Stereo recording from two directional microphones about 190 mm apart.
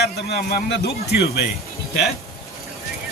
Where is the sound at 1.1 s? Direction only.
60° left (ahead or behind).